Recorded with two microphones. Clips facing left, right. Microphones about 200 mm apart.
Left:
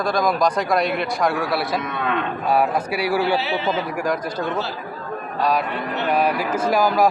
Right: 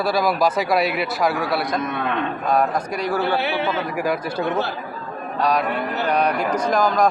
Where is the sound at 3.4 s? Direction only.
60° right (ahead or behind).